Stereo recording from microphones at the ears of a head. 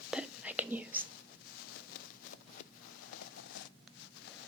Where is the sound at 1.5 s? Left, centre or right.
Left.